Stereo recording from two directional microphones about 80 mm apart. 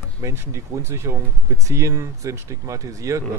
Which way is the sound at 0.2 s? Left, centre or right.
Right.